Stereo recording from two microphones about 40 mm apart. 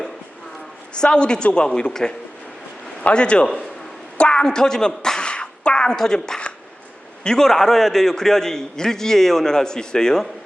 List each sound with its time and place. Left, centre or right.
0.9 s a man's voice: left
4.2 s a sound: left
6.0 s a man's voice: centre